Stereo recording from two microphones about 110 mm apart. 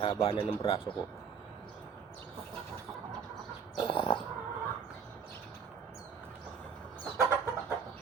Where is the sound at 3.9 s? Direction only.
45° left (ahead or behind).